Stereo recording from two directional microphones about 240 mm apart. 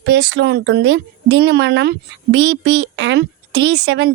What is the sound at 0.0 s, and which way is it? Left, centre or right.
A woman's voice, right.